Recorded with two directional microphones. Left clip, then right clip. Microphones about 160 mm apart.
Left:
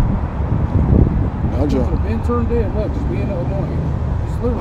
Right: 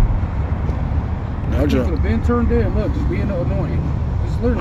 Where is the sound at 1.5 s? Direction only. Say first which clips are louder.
Right 1 dB; 15° left (ahead or behind).